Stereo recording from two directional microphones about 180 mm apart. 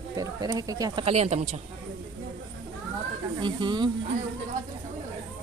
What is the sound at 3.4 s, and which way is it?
Speech, 25° right (ahead or behind).